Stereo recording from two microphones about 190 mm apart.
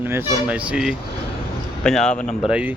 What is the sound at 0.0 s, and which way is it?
Speech, 10° right (ahead or behind).